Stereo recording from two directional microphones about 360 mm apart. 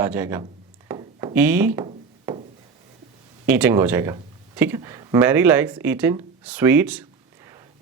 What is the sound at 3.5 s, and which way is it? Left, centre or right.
Speech, centre.